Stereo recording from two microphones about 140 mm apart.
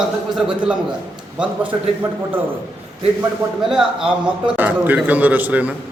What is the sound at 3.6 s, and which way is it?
A man's voice, 5° right (ahead or behind).